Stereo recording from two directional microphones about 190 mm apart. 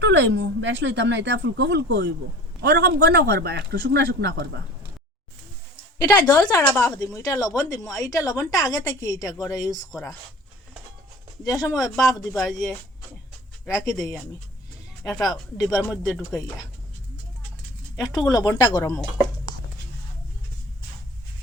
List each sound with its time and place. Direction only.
0.0 s a man's voice: 65° right (ahead or behind)
6.0 s a woman's voice: 15° left (ahead or behind)
11.4 s speech: 20° left (ahead or behind)
12.2 s speech: centre (ahead or behind)
15.0 s a woman's voice: 20° left (ahead or behind)
16.1 s speech: centre (ahead or behind)
18.0 s a woman's voice: 20° left (ahead or behind)